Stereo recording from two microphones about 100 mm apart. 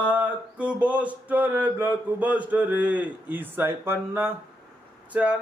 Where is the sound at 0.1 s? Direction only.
15° right (ahead or behind).